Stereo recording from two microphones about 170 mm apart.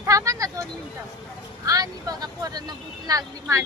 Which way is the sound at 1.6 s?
20° right (ahead or behind).